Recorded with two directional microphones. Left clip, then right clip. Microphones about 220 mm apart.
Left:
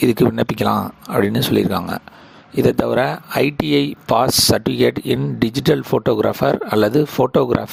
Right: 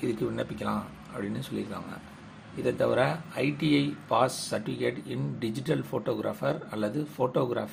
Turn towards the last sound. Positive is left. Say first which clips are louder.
# left 12 dB
turn(degrees=45)  # may be behind; listen again after turning